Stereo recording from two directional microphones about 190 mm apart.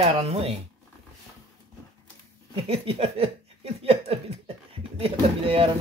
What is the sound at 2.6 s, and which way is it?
Speech, 30° right (ahead or behind).